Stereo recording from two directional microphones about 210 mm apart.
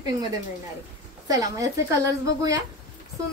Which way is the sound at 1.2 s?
15° right (ahead or behind).